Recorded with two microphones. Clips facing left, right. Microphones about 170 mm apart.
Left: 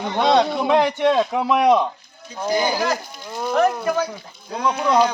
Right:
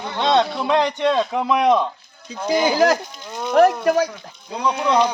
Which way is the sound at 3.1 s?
5° left (ahead or behind).